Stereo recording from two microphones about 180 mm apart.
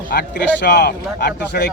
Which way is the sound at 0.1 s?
65° left (ahead or behind).